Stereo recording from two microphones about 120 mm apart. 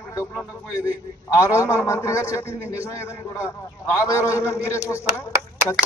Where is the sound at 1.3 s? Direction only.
25° left (ahead or behind).